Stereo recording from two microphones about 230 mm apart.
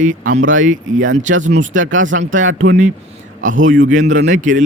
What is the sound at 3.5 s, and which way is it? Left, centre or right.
Speech, right.